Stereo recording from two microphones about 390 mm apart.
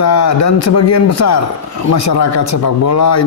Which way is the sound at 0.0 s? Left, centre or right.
Left.